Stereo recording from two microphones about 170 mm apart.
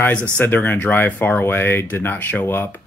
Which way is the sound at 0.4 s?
10° left (ahead or behind).